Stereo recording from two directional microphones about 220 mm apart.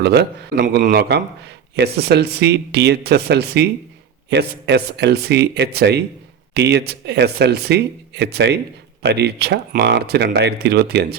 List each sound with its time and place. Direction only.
0.0 s speech: 45° right (ahead or behind)